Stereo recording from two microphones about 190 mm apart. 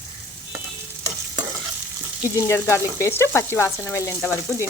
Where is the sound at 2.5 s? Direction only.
15° left (ahead or behind).